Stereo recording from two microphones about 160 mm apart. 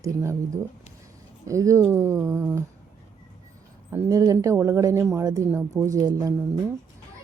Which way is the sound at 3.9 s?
20° right (ahead or behind).